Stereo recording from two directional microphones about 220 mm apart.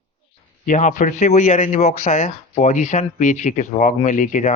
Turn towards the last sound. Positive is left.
turn(degrees=35)  # may be behind; listen again after turning